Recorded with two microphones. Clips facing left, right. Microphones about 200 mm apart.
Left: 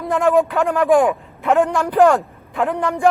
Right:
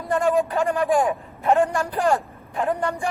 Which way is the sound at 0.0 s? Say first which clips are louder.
Left 4 dB; 90° left.